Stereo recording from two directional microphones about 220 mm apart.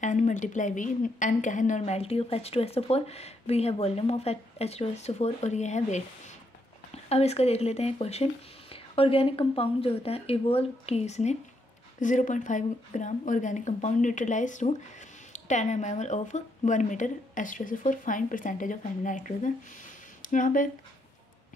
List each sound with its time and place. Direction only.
0.0 s a woman's voice: 35° left (ahead or behind)